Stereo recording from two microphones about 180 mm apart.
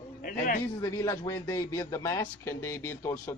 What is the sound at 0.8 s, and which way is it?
A man's voice, 20° left (ahead or behind).